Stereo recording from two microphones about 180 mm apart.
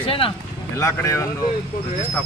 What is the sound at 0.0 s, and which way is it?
Speech, 30° left (ahead or behind).